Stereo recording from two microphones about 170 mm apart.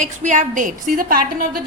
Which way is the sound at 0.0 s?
45° right (ahead or behind).